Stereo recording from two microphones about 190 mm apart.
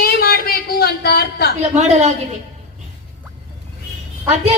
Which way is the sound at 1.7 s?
40° right (ahead or behind).